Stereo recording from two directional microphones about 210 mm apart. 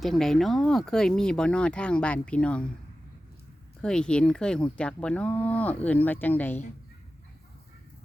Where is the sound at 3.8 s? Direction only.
5° left (ahead or behind).